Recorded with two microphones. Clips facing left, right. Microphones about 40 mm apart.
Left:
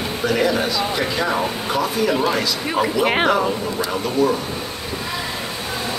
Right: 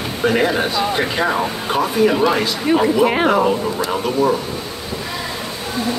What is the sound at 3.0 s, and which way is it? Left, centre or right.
Speech, left.